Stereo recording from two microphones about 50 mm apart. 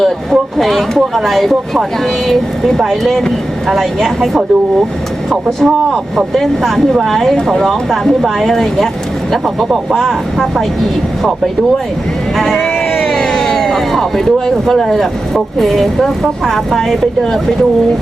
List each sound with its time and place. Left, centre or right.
0.0 s speech: centre
9.9 s speech: centre
12.4 s speech: centre
12.6 s a sound: centre
15.5 s speech: centre